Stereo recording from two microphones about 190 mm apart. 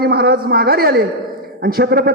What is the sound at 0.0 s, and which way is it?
A man's voice, 55° right (ahead or behind).